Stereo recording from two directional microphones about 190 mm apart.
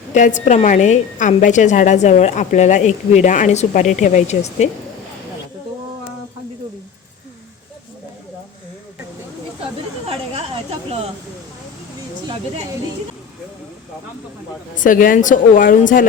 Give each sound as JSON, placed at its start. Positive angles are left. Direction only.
{"t": 0.1, "sound": "a woman's voice", "side_deg": 40}
{"t": 10.1, "sound": "a sound", "side_deg": -30}
{"t": 14.8, "sound": "a woman's voice", "side_deg": 45}